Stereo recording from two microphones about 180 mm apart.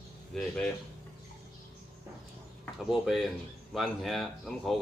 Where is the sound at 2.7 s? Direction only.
Centre (ahead or behind).